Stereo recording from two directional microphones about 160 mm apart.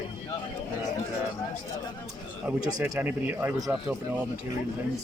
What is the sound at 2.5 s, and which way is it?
A man's voice, 10° right (ahead or behind).